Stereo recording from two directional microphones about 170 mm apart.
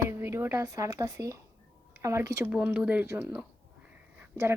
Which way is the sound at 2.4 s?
5° right (ahead or behind).